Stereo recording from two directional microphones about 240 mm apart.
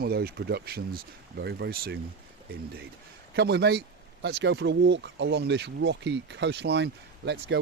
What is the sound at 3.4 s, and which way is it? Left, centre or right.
Speech, right.